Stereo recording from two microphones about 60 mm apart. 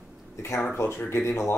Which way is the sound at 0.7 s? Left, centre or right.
Left.